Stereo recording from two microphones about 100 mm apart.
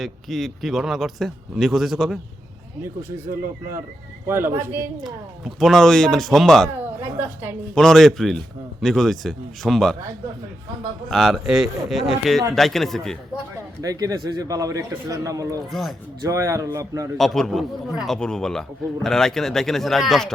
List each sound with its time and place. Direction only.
0.0 s speech: centre (ahead or behind)
4.3 s a woman's voice: 25° right (ahead or behind)
5.5 s speech: centre (ahead or behind)
7.0 s a woman's voice: 20° right (ahead or behind)
7.8 s speech: 5° left (ahead or behind)
11.1 s speech: centre (ahead or behind)
13.8 s a man's voice: 40° right (ahead or behind)
15.7 s speech: centre (ahead or behind)
16.2 s a man's voice: 30° right (ahead or behind)
17.2 s speech: 5° left (ahead or behind)